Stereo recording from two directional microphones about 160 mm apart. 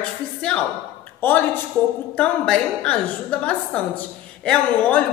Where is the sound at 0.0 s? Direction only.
5° left (ahead or behind).